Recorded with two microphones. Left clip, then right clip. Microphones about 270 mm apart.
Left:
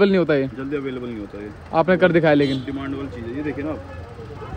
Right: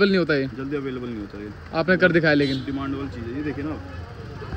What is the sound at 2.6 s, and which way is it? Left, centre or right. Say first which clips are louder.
Speech: even; centre.